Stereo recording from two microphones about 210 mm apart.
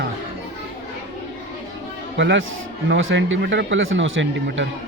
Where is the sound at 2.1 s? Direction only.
60° right (ahead or behind).